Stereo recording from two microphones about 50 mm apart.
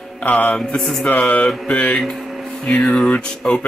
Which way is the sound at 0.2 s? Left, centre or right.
Left.